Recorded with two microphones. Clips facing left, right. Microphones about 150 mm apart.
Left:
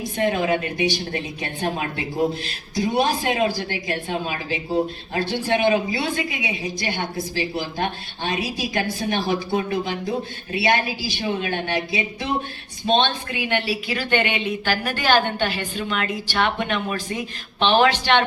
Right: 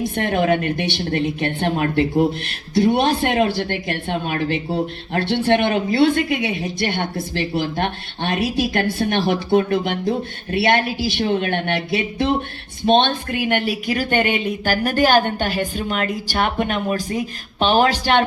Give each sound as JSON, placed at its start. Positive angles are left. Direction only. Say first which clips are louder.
{"t": 0.0, "sound": "a woman's voice", "louder": "right 2 dB", "side_deg": -60}